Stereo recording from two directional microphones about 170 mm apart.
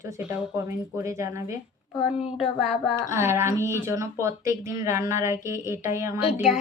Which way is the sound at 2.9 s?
15° right (ahead or behind).